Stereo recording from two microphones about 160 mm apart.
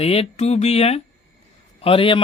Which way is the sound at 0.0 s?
40° left (ahead or behind).